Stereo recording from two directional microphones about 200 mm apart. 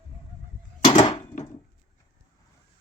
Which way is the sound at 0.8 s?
30° left (ahead or behind).